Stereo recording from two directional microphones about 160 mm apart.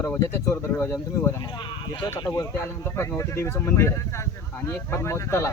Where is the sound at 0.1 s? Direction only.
15° left (ahead or behind).